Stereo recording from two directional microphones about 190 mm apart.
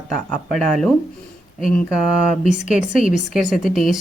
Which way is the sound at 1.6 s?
Centre (ahead or behind).